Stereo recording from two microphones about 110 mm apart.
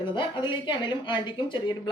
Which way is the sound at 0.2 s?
45° left (ahead or behind).